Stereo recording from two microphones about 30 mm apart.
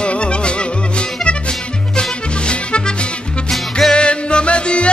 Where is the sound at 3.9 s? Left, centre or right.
Left.